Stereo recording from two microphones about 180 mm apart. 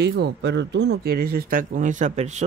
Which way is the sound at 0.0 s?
70° right (ahead or behind).